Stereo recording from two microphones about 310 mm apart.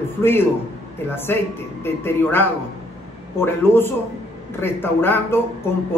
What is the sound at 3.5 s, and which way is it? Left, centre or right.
A man's voice, centre.